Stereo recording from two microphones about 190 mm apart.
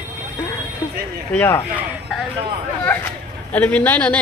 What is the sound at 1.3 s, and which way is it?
Speech, 15° left (ahead or behind).